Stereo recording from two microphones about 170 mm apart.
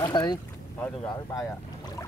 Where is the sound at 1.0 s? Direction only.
25° left (ahead or behind).